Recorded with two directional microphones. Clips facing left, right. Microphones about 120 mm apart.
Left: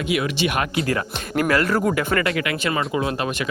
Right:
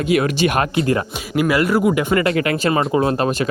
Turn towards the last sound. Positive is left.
turn(degrees=-35)  # may be behind; listen again after turning